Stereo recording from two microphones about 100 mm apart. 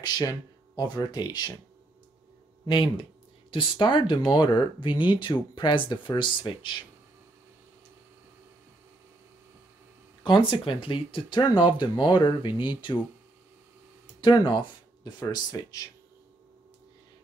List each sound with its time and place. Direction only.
0.0 s speech: 40° left (ahead or behind)
2.6 s speech: 55° left (ahead or behind)
10.2 s speech: 60° left (ahead or behind)
14.2 s speech: 55° left (ahead or behind)
15.5 s speech: 35° left (ahead or behind)